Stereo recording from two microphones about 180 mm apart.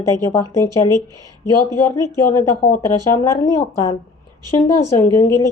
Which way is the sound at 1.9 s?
15° left (ahead or behind).